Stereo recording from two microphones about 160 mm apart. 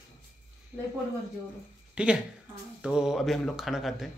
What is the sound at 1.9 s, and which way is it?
Speech, 5° right (ahead or behind).